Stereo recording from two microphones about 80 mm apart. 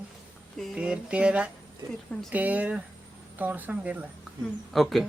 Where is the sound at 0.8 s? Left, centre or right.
Centre.